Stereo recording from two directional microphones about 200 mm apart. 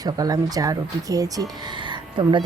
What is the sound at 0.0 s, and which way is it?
Speech, 20° right (ahead or behind).